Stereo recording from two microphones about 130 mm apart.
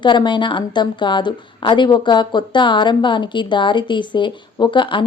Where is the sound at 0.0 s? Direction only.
35° left (ahead or behind).